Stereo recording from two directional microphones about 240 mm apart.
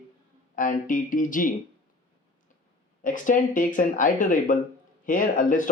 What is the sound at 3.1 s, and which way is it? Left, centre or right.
A man's voice, left.